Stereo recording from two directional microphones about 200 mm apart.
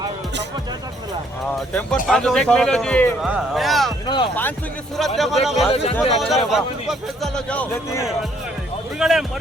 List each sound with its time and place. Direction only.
1.5 s a man's voice: 5° left (ahead or behind)
4.0 s speech: 20° left (ahead or behind)
4.9 s a man's voice: centre (ahead or behind)
5.6 s a man's voice: 30° left (ahead or behind)
6.1 s a man's voice: centre (ahead or behind)